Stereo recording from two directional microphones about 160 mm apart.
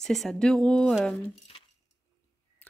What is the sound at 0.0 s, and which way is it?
Speech, centre (ahead or behind).